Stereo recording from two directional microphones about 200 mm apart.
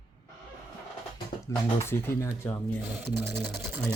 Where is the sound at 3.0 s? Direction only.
10° right (ahead or behind).